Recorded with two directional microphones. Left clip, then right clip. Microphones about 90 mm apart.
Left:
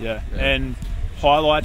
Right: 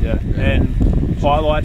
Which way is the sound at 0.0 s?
30° left (ahead or behind).